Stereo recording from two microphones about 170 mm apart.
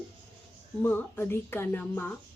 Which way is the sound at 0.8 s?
10° left (ahead or behind).